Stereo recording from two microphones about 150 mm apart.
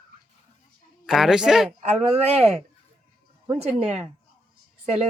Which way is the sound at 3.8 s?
45° right (ahead or behind).